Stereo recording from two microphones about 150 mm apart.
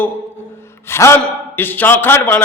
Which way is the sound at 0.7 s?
15° left (ahead or behind).